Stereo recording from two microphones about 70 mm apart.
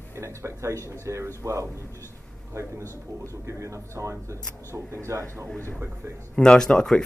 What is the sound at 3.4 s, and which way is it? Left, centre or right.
Speech, right.